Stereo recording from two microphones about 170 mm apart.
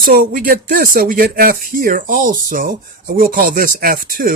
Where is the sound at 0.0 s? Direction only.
55° right (ahead or behind).